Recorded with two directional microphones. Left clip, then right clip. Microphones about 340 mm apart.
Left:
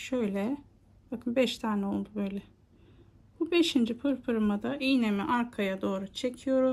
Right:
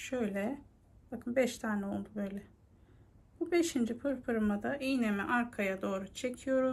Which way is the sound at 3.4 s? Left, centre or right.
Centre.